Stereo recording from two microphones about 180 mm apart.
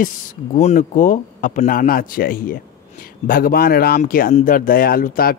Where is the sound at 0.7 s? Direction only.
45° left (ahead or behind).